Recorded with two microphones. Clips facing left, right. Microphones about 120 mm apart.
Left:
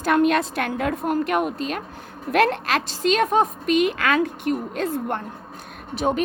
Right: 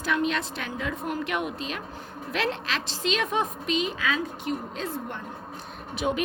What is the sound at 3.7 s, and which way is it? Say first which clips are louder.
A woman's voice: left 7 dB; 60° left (ahead or behind).